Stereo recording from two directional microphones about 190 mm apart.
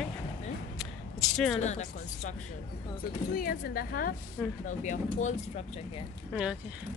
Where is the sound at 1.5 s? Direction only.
35° left (ahead or behind).